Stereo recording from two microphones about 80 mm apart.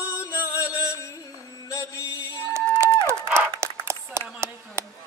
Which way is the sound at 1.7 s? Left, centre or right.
Left.